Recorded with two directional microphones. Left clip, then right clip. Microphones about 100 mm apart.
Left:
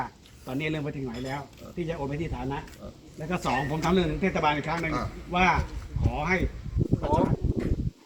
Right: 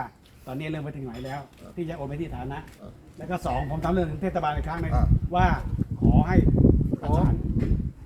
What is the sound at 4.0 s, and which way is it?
Speech, 55° right (ahead or behind).